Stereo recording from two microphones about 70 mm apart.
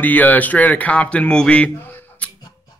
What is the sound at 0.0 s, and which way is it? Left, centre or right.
Speech, left.